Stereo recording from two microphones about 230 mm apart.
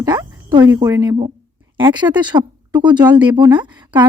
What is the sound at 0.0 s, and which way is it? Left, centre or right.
A woman's voice, centre.